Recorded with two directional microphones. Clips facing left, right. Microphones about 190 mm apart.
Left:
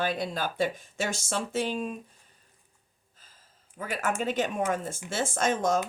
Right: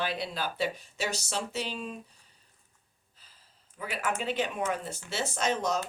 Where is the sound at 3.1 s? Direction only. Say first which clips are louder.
Left 2 dB; 45° left (ahead or behind).